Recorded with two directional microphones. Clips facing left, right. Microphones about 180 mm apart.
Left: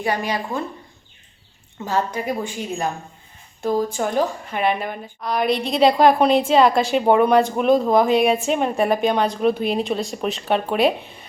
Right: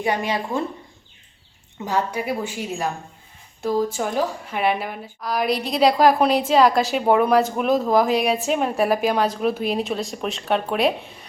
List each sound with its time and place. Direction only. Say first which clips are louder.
0.0 s speech: even; 20° right (ahead or behind)
1.8 s a woman's voice: left 1 dB; 15° right (ahead or behind)
3.8 s a woman's voice: left 2 dB; 5° right (ahead or behind)